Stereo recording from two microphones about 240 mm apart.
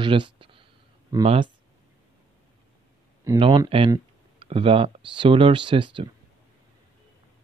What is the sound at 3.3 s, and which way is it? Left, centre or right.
Speech, centre.